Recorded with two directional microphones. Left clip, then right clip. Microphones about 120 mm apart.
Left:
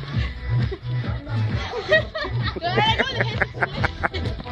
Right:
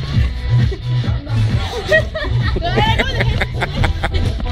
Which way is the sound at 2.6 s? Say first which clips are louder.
Right 3 dB; 15° left (ahead or behind).